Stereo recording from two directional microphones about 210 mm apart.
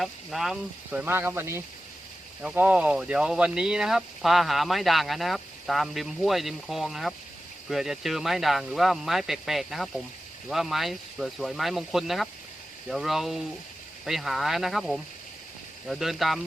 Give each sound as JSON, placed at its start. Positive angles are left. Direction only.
{"t": 0.0, "sound": "speech", "side_deg": 0}